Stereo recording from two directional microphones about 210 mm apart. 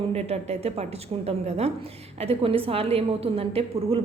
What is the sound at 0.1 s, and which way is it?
A woman's voice, 30° right (ahead or behind).